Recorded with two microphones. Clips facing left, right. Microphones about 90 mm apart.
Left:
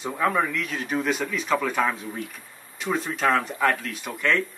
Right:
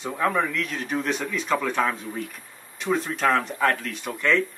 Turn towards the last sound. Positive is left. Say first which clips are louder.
# right 1 dB
turn(degrees=0)  # may be behind; listen again after turning